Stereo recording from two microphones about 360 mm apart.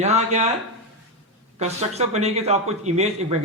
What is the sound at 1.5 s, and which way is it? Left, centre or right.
A man's voice, centre.